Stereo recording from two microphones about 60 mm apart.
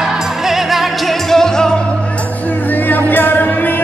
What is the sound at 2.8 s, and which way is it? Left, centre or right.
Music, left.